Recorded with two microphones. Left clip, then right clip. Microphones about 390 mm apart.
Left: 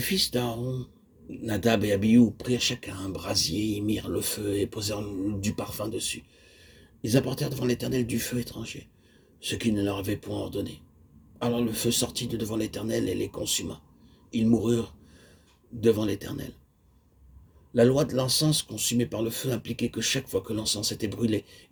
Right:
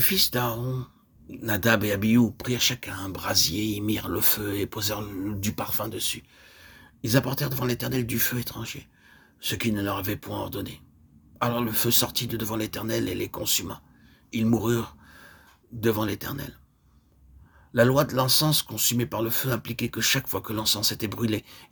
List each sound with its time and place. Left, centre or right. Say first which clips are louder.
0.0 s speech: right 2 dB; right
17.7 s speech: right 1 dB; right